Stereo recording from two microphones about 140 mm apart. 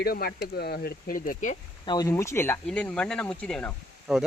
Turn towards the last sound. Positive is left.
turn(degrees=-5)  # may be behind; listen again after turning